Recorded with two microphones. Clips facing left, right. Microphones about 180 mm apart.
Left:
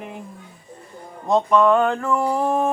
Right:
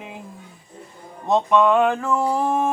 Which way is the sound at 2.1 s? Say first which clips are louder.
Even; 20° right (ahead or behind).